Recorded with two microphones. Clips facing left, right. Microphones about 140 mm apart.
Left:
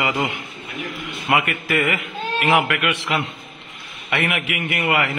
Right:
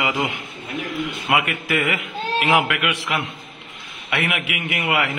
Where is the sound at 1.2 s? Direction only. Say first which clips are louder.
Left 3 dB; 10° right (ahead or behind).